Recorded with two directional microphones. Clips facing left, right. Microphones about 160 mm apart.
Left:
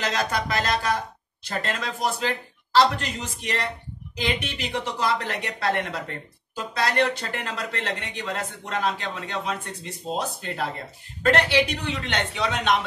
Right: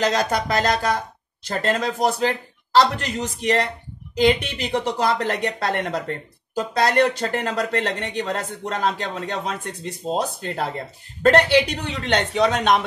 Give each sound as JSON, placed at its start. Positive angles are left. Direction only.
{"t": 0.0, "sound": "speech", "side_deg": -40}